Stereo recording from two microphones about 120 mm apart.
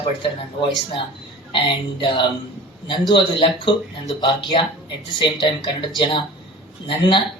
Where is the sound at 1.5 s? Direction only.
45° left (ahead or behind).